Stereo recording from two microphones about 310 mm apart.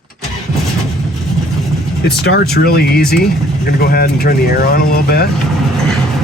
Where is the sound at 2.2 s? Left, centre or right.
Left.